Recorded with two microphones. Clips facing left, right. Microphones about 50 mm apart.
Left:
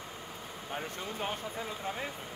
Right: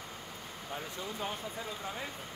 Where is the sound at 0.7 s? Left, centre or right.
Left.